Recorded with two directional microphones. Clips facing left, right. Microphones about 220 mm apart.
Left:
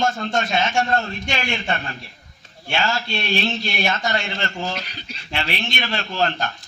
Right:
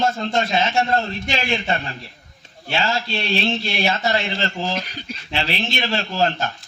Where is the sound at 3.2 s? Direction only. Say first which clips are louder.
Right 1 dB; 30° right (ahead or behind).